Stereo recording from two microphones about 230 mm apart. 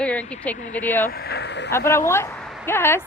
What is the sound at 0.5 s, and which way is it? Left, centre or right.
Speech, left.